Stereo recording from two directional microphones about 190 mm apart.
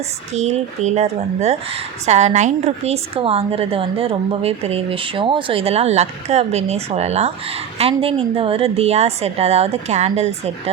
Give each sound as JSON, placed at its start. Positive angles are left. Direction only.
{"t": 0.3, "sound": "speech", "side_deg": -35}